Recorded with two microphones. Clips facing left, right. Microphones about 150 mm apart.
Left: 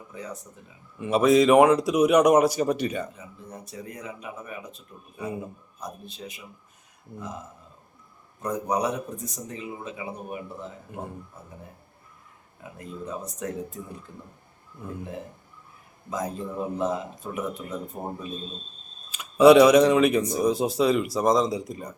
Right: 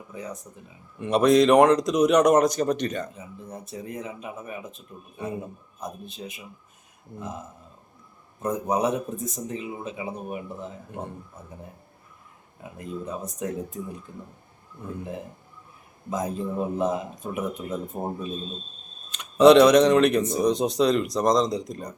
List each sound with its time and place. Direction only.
0.9 s speech: 5° left (ahead or behind)
3.2 s speech: 25° right (ahead or behind)
8.4 s speech: 25° right (ahead or behind)
12.6 s speech: 20° right (ahead or behind)
16.0 s speech: 20° right (ahead or behind)
19.1 s speech: 5° left (ahead or behind)